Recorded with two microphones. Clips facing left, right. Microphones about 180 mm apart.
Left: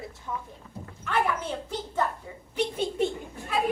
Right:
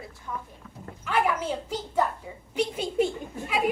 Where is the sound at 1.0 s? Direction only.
10° right (ahead or behind).